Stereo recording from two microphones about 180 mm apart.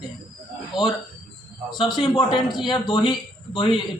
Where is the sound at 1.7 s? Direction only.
25° left (ahead or behind).